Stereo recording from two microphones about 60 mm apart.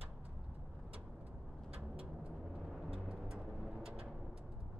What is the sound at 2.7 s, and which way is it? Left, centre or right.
Vehicle, centre.